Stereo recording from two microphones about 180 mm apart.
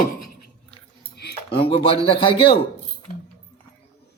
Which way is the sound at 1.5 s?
30° left (ahead or behind).